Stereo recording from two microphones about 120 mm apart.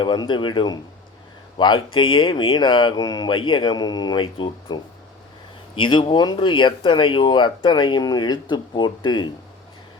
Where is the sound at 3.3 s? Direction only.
45° left (ahead or behind).